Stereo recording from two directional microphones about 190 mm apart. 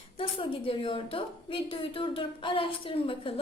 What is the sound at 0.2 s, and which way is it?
A woman's voice, 25° left (ahead or behind).